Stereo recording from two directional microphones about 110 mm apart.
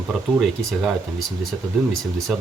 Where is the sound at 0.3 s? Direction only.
Centre (ahead or behind).